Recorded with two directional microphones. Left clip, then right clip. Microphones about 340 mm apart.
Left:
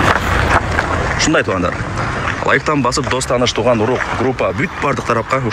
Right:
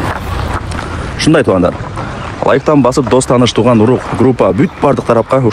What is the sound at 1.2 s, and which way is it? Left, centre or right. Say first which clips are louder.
Speech: right 8 dB; centre.